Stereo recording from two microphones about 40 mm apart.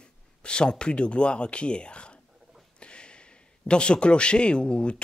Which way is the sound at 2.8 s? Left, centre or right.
Left.